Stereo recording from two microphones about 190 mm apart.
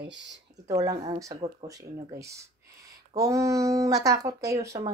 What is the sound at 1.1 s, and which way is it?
A woman's voice, 15° right (ahead or behind).